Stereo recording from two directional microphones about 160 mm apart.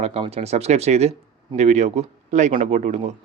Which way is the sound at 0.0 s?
40° right (ahead or behind).